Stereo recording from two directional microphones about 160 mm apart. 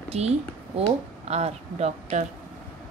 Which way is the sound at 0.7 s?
40° right (ahead or behind).